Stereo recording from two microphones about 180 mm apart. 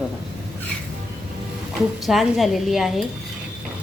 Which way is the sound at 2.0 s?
Centre (ahead or behind).